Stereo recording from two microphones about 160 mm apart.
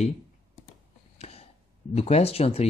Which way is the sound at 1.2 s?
40° left (ahead or behind).